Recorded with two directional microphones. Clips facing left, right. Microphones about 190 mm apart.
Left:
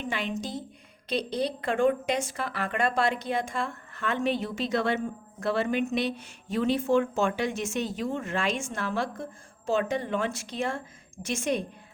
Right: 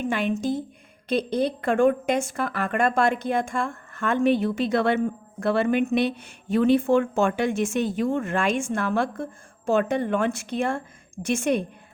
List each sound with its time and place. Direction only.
0.0 s a woman's voice: 50° right (ahead or behind)